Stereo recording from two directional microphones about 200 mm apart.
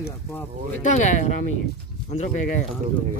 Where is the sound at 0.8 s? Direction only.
35° left (ahead or behind).